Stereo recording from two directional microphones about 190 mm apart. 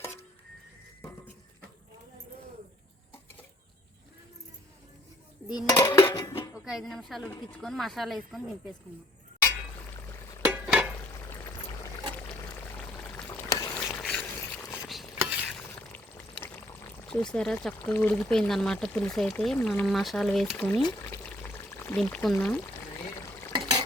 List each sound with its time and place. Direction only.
5.5 s cutlery: 20° left (ahead or behind)
6.7 s speech: centre (ahead or behind)
10.5 s stir: 5° right (ahead or behind)
11.2 s pour: 15° left (ahead or behind)
13.3 s stir: 15° left (ahead or behind)
13.7 s a sound: 5° left (ahead or behind)
14.8 s stir: 5° right (ahead or behind)
15.9 s boiling: 10° left (ahead or behind)
17.1 s speech: 5° left (ahead or behind)
20.8 s pour: 10° left (ahead or behind)
23.5 s a sound: 25° right (ahead or behind)